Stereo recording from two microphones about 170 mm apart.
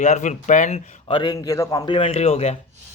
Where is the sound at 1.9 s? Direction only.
35° left (ahead or behind).